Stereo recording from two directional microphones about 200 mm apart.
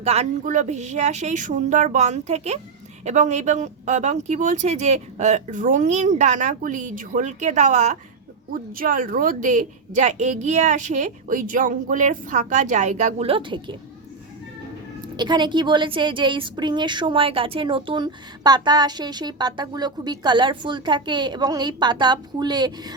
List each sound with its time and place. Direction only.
0.0 s speech: 35° right (ahead or behind)
15.0 s a woman's voice: 20° right (ahead or behind)